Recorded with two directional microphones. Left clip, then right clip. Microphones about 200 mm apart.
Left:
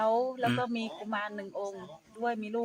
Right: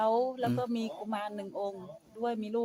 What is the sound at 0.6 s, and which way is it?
Speech, 25° right (ahead or behind).